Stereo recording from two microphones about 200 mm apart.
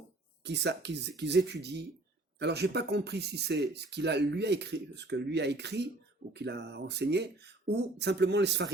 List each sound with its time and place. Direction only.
0.4 s speech: 60° right (ahead or behind)